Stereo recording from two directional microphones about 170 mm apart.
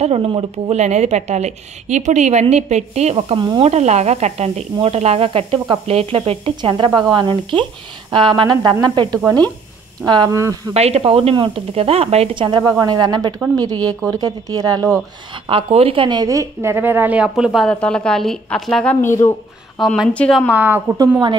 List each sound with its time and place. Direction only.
0.0 s speech: 35° right (ahead or behind)
3.7 s speech: 40° right (ahead or behind); by 10.7 s 20° right (ahead or behind)
10.7 s speech: 40° right (ahead or behind); by 14.9 s 20° right (ahead or behind)
15.4 s a woman's voice: 35° right (ahead or behind); by 20.5 s 5° left (ahead or behind)
20.5 s a woman's voice: 10° right (ahead or behind)